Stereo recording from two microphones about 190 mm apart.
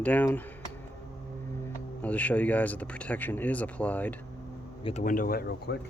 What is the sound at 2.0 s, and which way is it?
Speech, 10° left (ahead or behind).